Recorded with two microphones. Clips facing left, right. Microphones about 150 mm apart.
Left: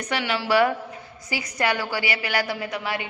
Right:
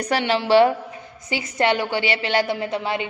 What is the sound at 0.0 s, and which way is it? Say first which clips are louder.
A woman's voice: right 5 dB; 35° right (ahead or behind).